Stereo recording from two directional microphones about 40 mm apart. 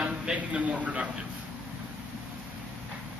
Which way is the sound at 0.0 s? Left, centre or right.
Right.